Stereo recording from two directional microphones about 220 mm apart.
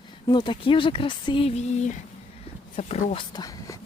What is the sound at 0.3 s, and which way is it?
Speech, 20° left (ahead or behind).